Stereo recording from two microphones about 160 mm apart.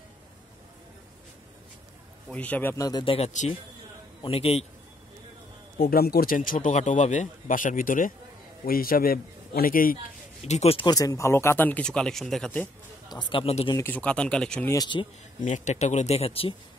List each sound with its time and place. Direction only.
2.2 s a man's voice: 10° left (ahead or behind); by 4.6 s 40° left (ahead or behind)
5.8 s a man's voice: 75° left (ahead or behind)
10.4 s a man's voice: 40° left (ahead or behind)
10.9 s speech: 20° left (ahead or behind); by 12.6 s 5° left (ahead or behind)
13.1 s a man's voice: 30° left (ahead or behind)
13.7 s speech: 10° left (ahead or behind)
14.7 s speech: 25° left (ahead or behind)
15.4 s speech: 50° left (ahead or behind)